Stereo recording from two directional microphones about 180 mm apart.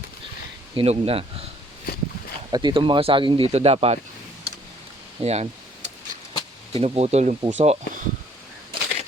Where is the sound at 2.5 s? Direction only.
25° right (ahead or behind).